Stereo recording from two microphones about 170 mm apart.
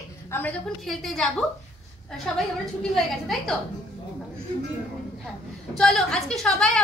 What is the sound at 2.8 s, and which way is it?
Speech, centre (ahead or behind).